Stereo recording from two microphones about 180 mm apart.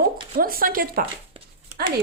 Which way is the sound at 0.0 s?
55° right (ahead or behind).